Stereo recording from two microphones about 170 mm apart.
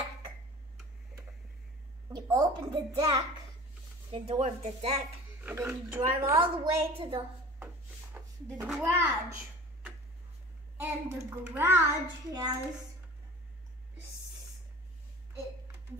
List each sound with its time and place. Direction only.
2.0 s a child's voice: 20° right (ahead or behind)
4.1 s a woman's voice: 40° right (ahead or behind)
5.4 s a child's voice: 15° right (ahead or behind)
6.5 s a woman's voice: 30° right (ahead or behind)
7.6 s a sound: centre (ahead or behind)
8.6 s a child's voice: centre (ahead or behind)
10.8 s a child's voice: 10° right (ahead or behind)
12.3 s a child's voice: 25° right (ahead or behind)